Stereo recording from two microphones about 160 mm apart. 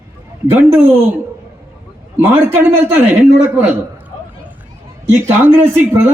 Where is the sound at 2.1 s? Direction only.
15° right (ahead or behind).